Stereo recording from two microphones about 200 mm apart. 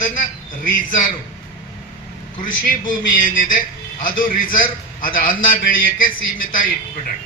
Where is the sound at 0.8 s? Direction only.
40° left (ahead or behind).